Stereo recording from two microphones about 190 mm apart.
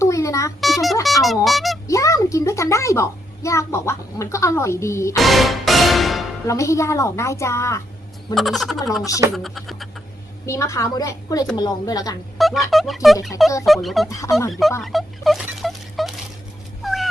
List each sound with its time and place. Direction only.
0.0 s a sound: 15° left (ahead or behind)
0.6 s music: centre (ahead or behind)
1.5 s a sound: centre (ahead or behind)
1.9 s a child's voice: 15° left (ahead or behind)
5.1 s music: centre (ahead or behind)
6.5 s a woman's voice: 15° left (ahead or behind)
8.4 s speech: centre (ahead or behind)
10.4 s a woman's voice: 15° left (ahead or behind)
12.4 s fowl: centre (ahead or behind)
12.7 s speech: centre (ahead or behind)
14.1 s a woman's voice: 15° left (ahead or behind)
14.8 s rodents: centre (ahead or behind)
16.8 s dog: centre (ahead or behind)